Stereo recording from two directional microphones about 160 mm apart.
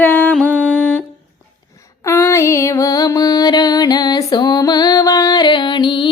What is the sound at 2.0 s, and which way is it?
Music, 20° left (ahead or behind).